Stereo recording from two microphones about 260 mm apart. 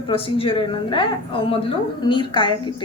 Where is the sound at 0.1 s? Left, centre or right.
Left.